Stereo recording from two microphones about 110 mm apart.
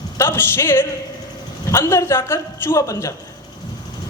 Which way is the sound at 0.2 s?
20° left (ahead or behind).